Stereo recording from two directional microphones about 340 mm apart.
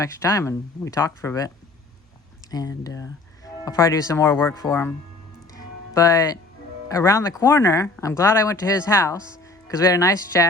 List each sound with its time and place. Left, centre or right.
0.0 s speech: centre
5.5 s music: centre
6.8 s speech: centre